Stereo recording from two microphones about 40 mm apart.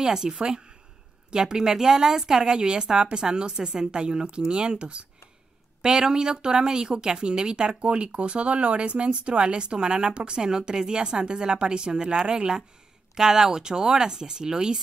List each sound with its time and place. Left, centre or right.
0.0 s speech: centre